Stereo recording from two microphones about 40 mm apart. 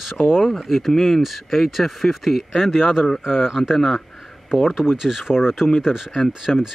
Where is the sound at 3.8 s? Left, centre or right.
Centre.